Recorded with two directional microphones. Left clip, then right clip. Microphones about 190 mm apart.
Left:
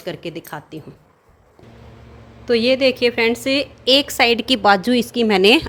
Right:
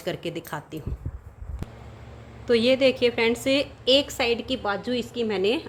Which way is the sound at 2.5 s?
15° left (ahead or behind).